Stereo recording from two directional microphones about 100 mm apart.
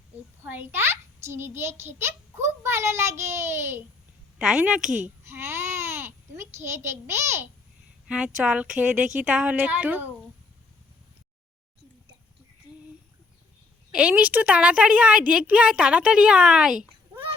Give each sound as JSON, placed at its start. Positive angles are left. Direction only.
{"t": 0.4, "sound": "a child's voice", "side_deg": -20}
{"t": 4.4, "sound": "a woman's voice", "side_deg": -5}
{"t": 5.3, "sound": "babbling", "side_deg": -25}
{"t": 8.0, "sound": "a woman's voice", "side_deg": -10}
{"t": 13.9, "sound": "a woman's voice", "side_deg": -15}